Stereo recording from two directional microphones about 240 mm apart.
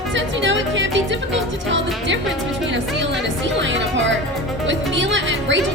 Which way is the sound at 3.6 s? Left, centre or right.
Right.